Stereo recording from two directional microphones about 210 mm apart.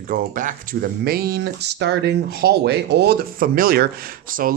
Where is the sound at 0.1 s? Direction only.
40° right (ahead or behind).